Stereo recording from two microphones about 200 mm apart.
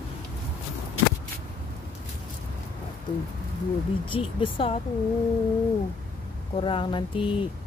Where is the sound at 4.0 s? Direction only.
25° left (ahead or behind).